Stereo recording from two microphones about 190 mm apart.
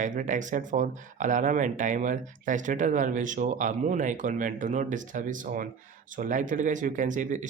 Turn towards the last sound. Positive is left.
turn(degrees=-40)  # may be behind; listen again after turning